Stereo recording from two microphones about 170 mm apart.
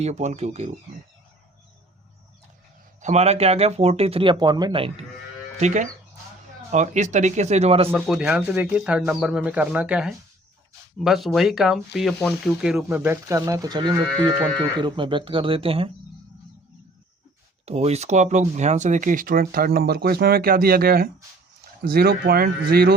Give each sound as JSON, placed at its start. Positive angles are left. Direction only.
{"t": 0.0, "sound": "speech", "side_deg": -40}
{"t": 3.0, "sound": "speech", "side_deg": -40}
{"t": 5.5, "sound": "speech", "side_deg": -45}
{"t": 7.9, "sound": "speech", "side_deg": 0}
{"t": 17.7, "sound": "speech", "side_deg": -40}